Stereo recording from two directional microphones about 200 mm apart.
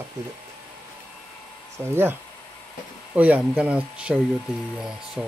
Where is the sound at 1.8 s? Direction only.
10° right (ahead or behind).